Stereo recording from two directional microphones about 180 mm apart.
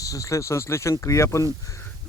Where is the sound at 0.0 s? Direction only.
20° left (ahead or behind).